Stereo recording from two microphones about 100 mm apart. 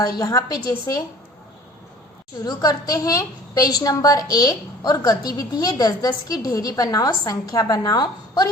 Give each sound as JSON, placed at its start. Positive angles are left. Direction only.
{"t": 0.0, "sound": "a woman's voice", "side_deg": 35}
{"t": 2.4, "sound": "a woman's voice", "side_deg": 40}
{"t": 7.9, "sound": "a woman's voice", "side_deg": 45}